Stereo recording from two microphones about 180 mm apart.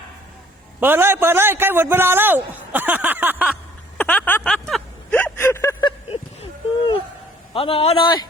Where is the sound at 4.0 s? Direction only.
5° left (ahead or behind).